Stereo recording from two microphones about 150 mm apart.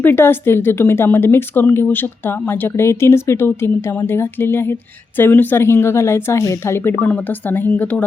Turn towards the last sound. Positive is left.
turn(degrees=10)  # may be behind; listen again after turning